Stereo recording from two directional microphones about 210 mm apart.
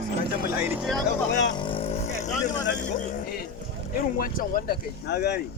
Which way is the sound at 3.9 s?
45° left (ahead or behind).